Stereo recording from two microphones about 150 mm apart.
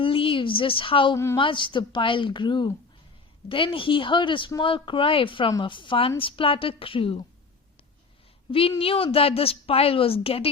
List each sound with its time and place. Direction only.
0.0 s a woman's voice: 35° left (ahead or behind)
8.8 s speech: 40° left (ahead or behind)